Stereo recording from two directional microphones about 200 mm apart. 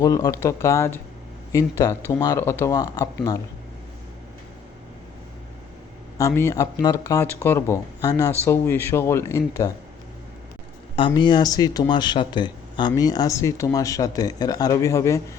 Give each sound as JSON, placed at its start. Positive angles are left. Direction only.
{"t": 0.0, "sound": "speech", "side_deg": 15}
{"t": 6.1, "sound": "speech", "side_deg": 15}
{"t": 10.9, "sound": "speech", "side_deg": 25}